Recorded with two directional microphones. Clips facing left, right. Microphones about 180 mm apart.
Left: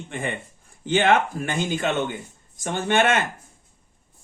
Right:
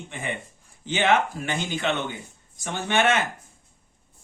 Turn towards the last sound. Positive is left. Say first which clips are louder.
# left 2 dB
turn(degrees=50)  # may be behind; listen again after turning